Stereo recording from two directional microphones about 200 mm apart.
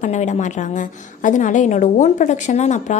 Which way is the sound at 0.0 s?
35° left (ahead or behind).